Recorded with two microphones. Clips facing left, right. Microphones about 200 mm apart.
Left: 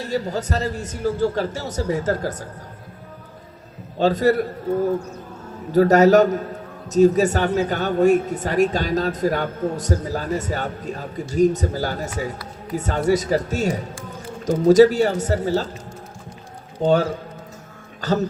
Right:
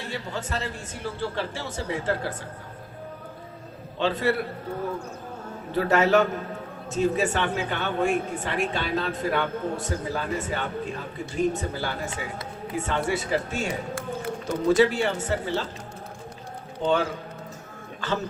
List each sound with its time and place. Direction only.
0.0 s speech: 40° left (ahead or behind)
3.9 s speech: 40° left (ahead or behind)
5.7 s speech: 40° left (ahead or behind)
16.8 s speech: 40° left (ahead or behind)